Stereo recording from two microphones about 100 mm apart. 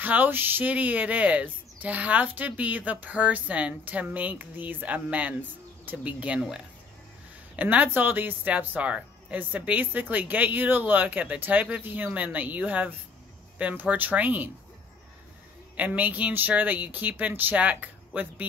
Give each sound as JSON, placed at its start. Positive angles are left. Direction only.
{"t": 0.0, "sound": "speech", "side_deg": -15}
{"t": 15.7, "sound": "speech", "side_deg": -15}